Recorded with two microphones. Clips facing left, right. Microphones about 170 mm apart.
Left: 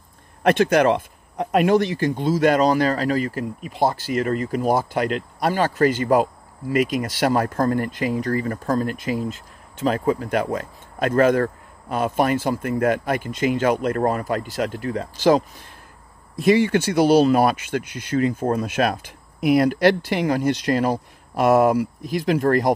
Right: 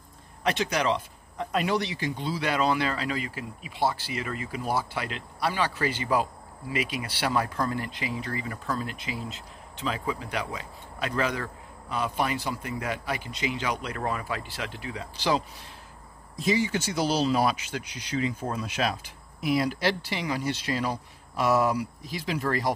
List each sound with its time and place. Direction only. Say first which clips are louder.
0.4 s speech: left 10 dB; 55° left (ahead or behind)
16.3 s speech: left 9 dB; 60° left (ahead or behind)